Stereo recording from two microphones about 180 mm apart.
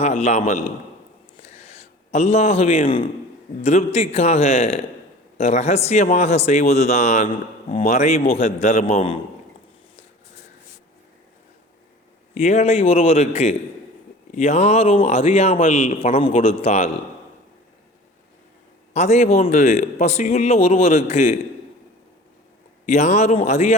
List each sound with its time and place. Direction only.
0.0 s a man's voice: 35° left (ahead or behind)
1.5 s a sound: 35° left (ahead or behind)
3.6 s a man's voice: 35° left (ahead or behind)
12.4 s a man's voice: 40° left (ahead or behind)
18.9 s a man's voice: 40° left (ahead or behind)
22.9 s a man's voice: 40° left (ahead or behind)